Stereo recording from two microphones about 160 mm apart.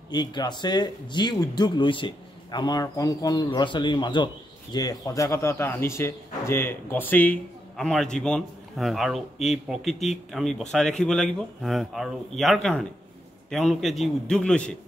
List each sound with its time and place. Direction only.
0.1 s a man's voice: 25° left (ahead or behind); by 14.8 s 5° left (ahead or behind)